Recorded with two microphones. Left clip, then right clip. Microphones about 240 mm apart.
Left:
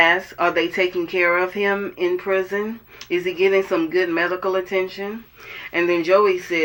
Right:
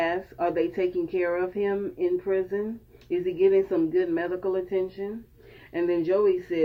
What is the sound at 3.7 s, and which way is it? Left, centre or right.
Speech, centre.